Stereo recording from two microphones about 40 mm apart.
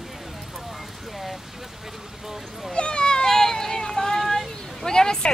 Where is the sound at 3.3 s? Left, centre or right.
Centre.